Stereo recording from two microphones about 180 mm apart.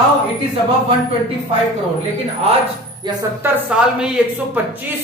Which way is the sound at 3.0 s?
25° right (ahead or behind).